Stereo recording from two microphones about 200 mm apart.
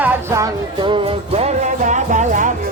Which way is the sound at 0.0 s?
10° right (ahead or behind).